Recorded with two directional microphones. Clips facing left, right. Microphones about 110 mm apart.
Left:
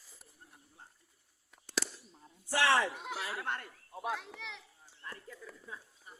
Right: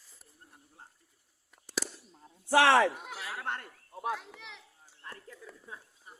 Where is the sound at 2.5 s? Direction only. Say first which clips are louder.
Right 6 dB; 90° right.